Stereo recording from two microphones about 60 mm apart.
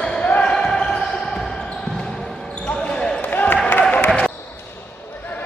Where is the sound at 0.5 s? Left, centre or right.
Centre.